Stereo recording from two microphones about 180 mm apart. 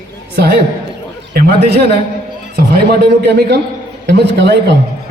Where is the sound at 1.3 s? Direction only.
60° right (ahead or behind).